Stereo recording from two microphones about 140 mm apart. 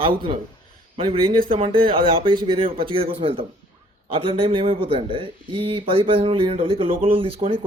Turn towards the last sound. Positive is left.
turn(degrees=-40)  # may be behind; listen again after turning